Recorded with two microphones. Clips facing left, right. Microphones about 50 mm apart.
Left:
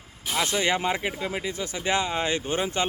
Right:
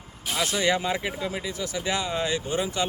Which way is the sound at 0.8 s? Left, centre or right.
Left.